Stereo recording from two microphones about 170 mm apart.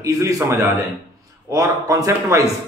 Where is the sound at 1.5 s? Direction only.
20° right (ahead or behind).